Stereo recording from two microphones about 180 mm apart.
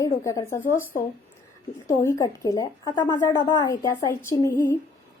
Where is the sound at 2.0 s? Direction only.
20° left (ahead or behind).